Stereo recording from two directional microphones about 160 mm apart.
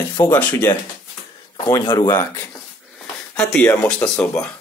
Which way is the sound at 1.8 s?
25° left (ahead or behind).